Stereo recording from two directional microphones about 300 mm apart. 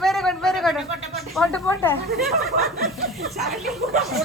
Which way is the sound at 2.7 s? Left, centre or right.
Right.